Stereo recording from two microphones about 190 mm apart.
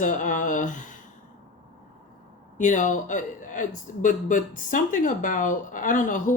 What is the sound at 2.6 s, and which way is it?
Speech, 40° left (ahead or behind).